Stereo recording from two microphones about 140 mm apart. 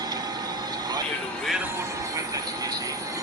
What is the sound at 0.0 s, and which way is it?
Vehicle, 30° right (ahead or behind).